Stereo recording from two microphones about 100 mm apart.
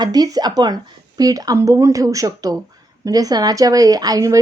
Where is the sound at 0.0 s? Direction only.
40° right (ahead or behind).